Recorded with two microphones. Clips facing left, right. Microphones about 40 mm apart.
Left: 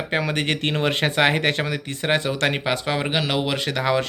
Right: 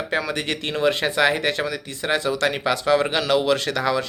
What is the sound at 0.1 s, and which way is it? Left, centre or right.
Speech, left.